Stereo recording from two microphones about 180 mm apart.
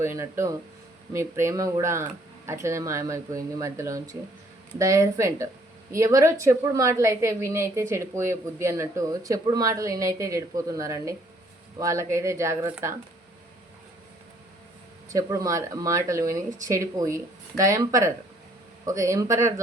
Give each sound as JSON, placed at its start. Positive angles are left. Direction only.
{"t": 0.0, "sound": "a woman's voice", "side_deg": -15}
{"t": 15.1, "sound": "a woman's voice", "side_deg": -20}